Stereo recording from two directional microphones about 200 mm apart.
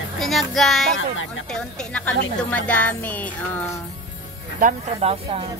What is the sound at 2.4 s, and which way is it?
Speech, 5° left (ahead or behind).